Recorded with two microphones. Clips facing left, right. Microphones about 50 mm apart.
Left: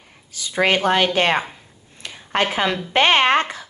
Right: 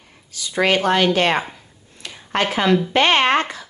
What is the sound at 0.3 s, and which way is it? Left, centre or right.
Speech, left.